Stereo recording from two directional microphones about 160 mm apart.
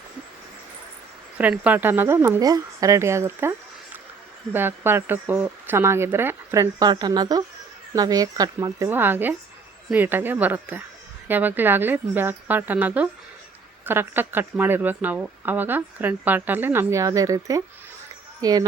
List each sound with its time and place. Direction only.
1.4 s speech: 10° right (ahead or behind)
4.5 s speech: 15° right (ahead or behind)